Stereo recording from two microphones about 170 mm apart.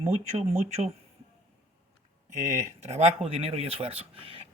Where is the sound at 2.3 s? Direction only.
15° right (ahead or behind).